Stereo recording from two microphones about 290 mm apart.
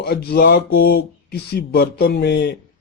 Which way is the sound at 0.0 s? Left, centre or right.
Left.